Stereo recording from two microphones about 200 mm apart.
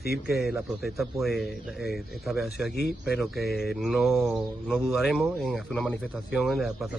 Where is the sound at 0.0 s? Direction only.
50° left (ahead or behind).